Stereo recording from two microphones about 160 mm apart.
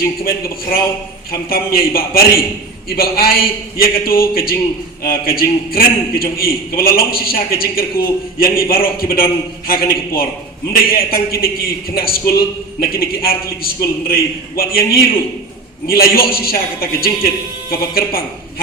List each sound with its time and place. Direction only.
0.3 s a man's voice: 65° left (ahead or behind)